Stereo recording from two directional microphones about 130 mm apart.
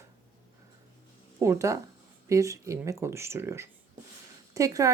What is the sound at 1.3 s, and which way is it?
Speech, 20° right (ahead or behind).